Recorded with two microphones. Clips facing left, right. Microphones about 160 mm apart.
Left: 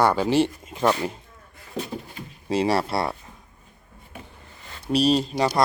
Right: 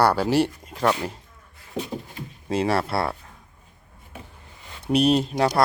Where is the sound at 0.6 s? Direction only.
5° left (ahead or behind).